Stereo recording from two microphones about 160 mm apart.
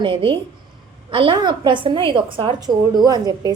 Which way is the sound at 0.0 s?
30° right (ahead or behind).